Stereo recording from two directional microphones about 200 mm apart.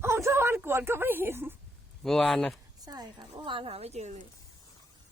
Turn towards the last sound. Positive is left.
turn(degrees=-35)  # may be behind; listen again after turning